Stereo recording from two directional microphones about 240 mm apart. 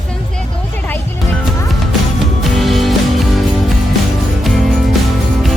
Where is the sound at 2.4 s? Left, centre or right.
Centre.